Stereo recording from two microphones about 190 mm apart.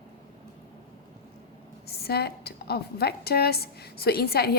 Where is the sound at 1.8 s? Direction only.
55° left (ahead or behind).